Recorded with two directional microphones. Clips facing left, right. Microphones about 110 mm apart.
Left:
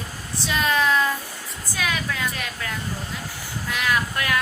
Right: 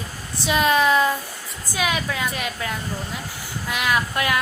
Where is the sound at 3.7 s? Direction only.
10° right (ahead or behind).